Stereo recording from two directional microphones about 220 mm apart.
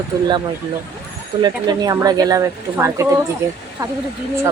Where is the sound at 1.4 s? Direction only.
20° right (ahead or behind).